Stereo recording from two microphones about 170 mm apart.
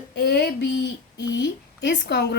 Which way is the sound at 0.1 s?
75° left (ahead or behind).